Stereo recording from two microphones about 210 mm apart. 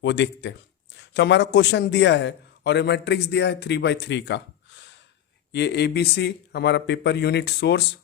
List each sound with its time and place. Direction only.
0.0 s a man's voice: 55° left (ahead or behind)